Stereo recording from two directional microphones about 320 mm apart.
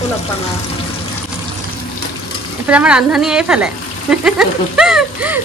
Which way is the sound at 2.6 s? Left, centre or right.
Centre.